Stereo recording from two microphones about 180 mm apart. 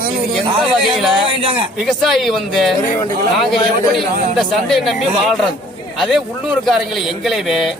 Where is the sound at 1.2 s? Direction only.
30° right (ahead or behind).